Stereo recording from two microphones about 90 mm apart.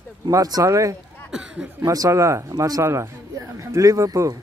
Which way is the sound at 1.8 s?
40° right (ahead or behind).